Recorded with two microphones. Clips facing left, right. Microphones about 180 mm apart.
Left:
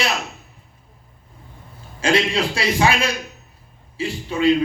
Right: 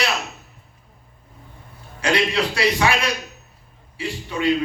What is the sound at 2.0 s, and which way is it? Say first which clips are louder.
A man's voice: left 1 dB; 25° left (ahead or behind).